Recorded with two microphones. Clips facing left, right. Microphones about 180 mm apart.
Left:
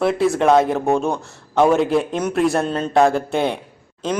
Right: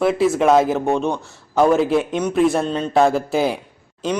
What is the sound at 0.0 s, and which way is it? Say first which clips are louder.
Speech: right 1 dB; centre (ahead or behind).